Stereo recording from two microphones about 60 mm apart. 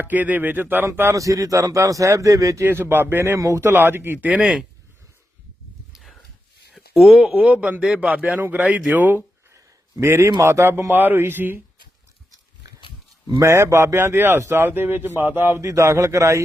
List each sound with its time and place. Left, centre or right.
0.0 s speech: right
1.1 s a man's voice: right
2.6 s speech: right
3.3 s a man's voice: right
3.6 s speech: right
5.9 s a sound: centre
7.3 s speech: right
8.6 s speech: right
10.0 s speech: right
13.2 s speech: right
14.1 s speech: right
15.6 s a man's voice: right